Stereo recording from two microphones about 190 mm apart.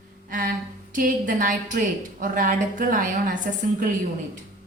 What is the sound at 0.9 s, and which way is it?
A woman's voice, 45° right (ahead or behind).